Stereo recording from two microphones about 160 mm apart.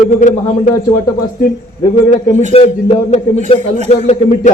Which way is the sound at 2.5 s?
40° left (ahead or behind).